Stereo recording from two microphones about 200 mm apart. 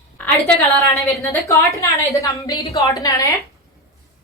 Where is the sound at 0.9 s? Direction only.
15° left (ahead or behind).